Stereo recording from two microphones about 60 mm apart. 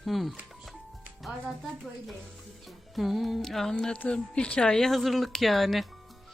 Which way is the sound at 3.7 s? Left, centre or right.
Centre.